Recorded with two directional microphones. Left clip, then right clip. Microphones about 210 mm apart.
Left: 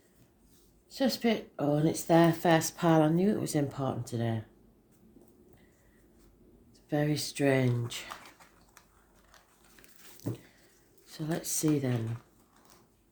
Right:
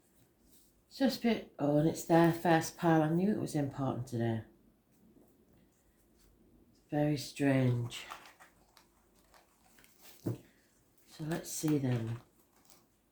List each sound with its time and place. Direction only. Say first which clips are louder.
0.9 s speech: left 3 dB; 40° left (ahead or behind)
6.9 s speech: left 3 dB; 45° left (ahead or behind)
11.1 s speech: left 5 dB; 45° left (ahead or behind)